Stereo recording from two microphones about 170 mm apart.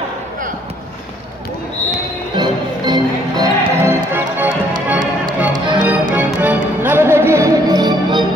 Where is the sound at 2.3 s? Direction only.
25° right (ahead or behind).